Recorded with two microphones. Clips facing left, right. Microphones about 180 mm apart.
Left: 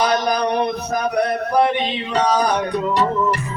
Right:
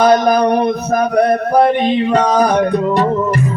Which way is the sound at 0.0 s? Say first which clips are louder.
Right 8 dB; 50° right (ahead or behind).